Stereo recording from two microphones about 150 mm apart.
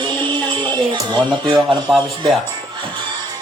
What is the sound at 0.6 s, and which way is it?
Speech, 30° right (ahead or behind).